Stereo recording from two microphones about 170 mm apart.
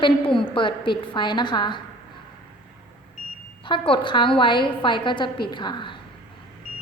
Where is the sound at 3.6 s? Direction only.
30° left (ahead or behind).